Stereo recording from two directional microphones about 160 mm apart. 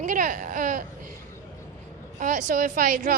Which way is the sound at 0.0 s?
55° right (ahead or behind).